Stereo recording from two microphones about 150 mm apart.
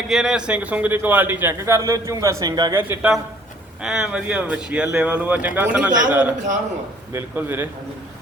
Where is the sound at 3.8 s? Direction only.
5° right (ahead or behind).